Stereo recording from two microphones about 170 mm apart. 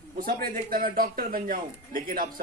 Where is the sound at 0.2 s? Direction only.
55° right (ahead or behind).